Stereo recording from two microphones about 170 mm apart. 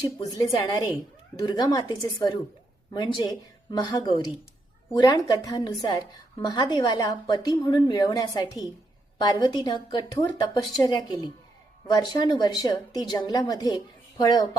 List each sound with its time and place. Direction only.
0.3 s a woman's voice: 25° left (ahead or behind)